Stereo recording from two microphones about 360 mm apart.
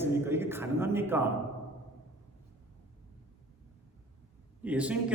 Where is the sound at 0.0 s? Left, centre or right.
Centre.